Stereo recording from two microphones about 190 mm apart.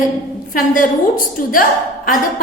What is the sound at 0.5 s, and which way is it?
Speech, 45° left (ahead or behind).